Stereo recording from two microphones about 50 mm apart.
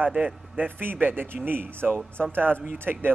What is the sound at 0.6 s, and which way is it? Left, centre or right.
A man's voice, right.